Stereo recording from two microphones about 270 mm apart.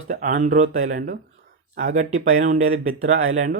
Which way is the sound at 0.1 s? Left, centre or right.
Right.